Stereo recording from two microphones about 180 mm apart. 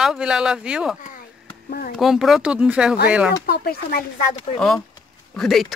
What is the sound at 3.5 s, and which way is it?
Speech, 60° left (ahead or behind).